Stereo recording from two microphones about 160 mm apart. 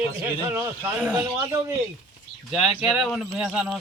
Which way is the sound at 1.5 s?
15° right (ahead or behind).